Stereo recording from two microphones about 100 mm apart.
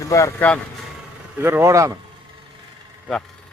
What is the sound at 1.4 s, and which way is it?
Speech, 30° right (ahead or behind).